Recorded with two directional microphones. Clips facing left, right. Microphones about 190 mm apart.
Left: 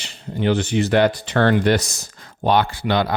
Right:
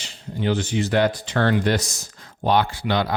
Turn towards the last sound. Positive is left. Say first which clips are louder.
# left 3 dB
turn(degrees=60)  # may be behind; listen again after turning